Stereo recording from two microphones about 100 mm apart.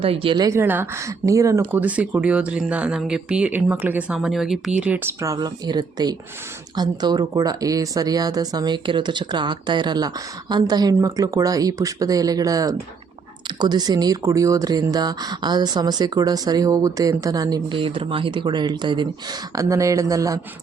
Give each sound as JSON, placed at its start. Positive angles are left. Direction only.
{"t": 0.0, "sound": "a woman's voice", "side_deg": -70}
{"t": 0.5, "sound": "speech", "side_deg": -20}
{"t": 1.8, "sound": "speech", "side_deg": -15}
{"t": 4.2, "sound": "speech", "side_deg": -5}
{"t": 5.2, "sound": "speech", "side_deg": -40}
{"t": 17.7, "sound": "speech", "side_deg": -60}
{"t": 19.5, "sound": "speech", "side_deg": -30}